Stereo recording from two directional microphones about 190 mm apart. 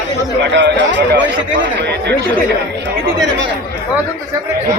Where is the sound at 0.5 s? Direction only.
70° right (ahead or behind).